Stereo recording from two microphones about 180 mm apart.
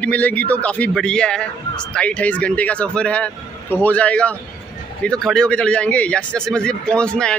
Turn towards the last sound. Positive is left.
turn(degrees=5)  # may be behind; listen again after turning